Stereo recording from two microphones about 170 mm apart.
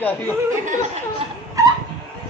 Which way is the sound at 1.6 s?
20° right (ahead or behind).